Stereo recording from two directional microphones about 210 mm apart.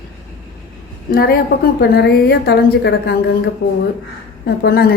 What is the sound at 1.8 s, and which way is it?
A woman's voice, 50° left (ahead or behind).